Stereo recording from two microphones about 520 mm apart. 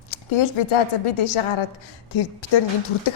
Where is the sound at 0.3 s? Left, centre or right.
Left.